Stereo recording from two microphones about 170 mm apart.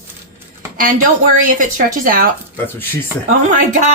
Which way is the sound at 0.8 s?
50° right (ahead or behind).